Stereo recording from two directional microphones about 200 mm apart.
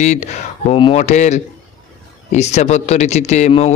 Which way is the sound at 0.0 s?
35° left (ahead or behind).